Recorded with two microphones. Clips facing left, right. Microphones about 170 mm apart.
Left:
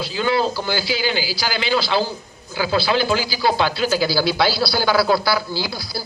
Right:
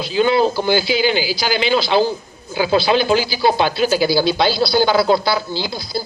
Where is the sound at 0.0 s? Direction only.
20° right (ahead or behind).